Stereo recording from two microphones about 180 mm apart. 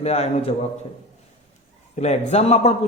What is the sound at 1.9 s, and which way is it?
Speech, 40° left (ahead or behind).